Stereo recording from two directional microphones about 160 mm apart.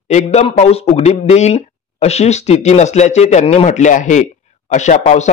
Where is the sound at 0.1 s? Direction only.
45° left (ahead or behind).